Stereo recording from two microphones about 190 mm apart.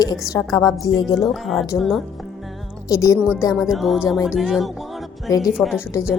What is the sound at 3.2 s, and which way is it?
Speech, 10° right (ahead or behind).